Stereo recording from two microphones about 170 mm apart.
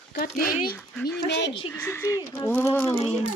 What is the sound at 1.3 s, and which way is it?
Speech, 90° left.